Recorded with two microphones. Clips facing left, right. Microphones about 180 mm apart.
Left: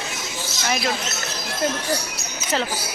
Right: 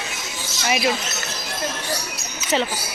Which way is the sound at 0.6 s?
5° right (ahead or behind).